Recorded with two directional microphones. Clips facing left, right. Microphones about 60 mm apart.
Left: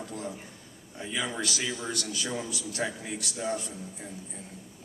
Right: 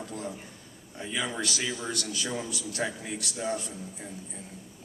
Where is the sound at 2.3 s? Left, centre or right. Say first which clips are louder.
Even; centre.